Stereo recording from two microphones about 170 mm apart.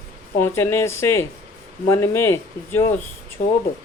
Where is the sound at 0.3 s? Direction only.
15° left (ahead or behind).